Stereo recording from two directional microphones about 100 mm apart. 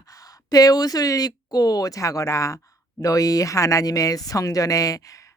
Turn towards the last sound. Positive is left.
turn(degrees=35)  # may be behind; listen again after turning